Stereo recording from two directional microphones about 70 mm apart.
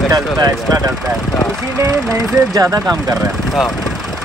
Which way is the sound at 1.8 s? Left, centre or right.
Right.